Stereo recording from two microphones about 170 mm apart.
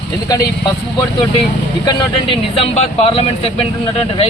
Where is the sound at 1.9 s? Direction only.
25° left (ahead or behind).